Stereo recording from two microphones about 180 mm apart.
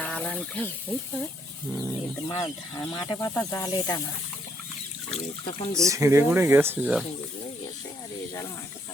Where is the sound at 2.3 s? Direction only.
20° left (ahead or behind).